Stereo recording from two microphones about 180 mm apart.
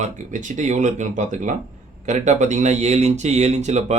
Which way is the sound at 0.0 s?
45° right (ahead or behind).